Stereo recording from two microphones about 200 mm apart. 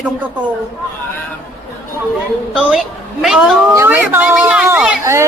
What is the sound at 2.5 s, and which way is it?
A woman's voice, centre (ahead or behind).